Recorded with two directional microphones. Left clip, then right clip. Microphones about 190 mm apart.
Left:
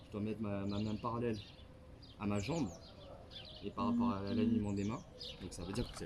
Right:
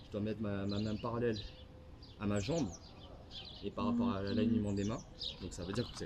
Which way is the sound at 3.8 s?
Centre (ahead or behind).